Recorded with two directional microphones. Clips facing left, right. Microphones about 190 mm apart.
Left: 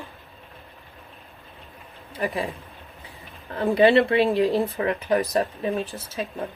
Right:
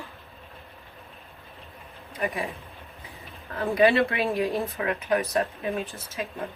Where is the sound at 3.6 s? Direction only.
30° left (ahead or behind).